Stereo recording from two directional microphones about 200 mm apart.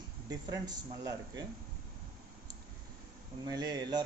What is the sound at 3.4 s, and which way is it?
Speech, 20° right (ahead or behind).